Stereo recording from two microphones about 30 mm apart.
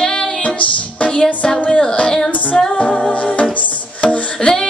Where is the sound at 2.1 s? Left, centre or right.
Left.